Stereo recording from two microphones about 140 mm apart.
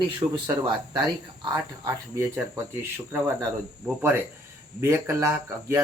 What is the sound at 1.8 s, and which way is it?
Speech, 20° right (ahead or behind).